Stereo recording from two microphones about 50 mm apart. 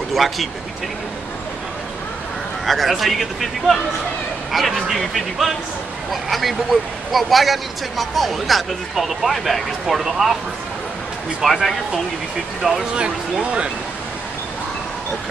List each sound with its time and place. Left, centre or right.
0.1 s speech: centre
2.6 s speech: centre
11.4 s speech: centre
12.9 s speech: centre